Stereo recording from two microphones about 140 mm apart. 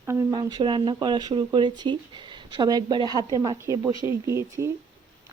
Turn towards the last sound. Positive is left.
turn(degrees=-20)  # may be behind; listen again after turning